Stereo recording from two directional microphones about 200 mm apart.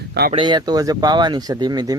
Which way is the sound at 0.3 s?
25° right (ahead or behind).